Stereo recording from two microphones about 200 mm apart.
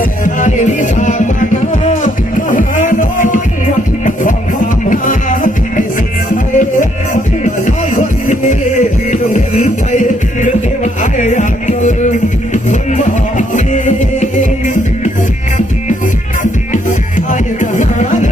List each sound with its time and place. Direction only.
0.3 s music: 40° left (ahead or behind)
7.9 s music: 40° left (ahead or behind)
16.4 s music: 40° left (ahead or behind)